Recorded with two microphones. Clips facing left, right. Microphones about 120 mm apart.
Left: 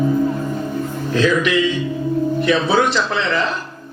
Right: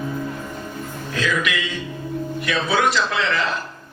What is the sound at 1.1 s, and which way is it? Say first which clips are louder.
Speech: left 7 dB; 30° left (ahead or behind).